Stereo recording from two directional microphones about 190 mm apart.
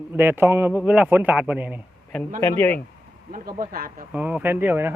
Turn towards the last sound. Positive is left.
turn(degrees=-10)  # may be behind; listen again after turning